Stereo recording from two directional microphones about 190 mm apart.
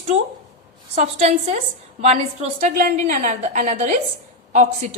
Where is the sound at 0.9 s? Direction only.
35° right (ahead or behind).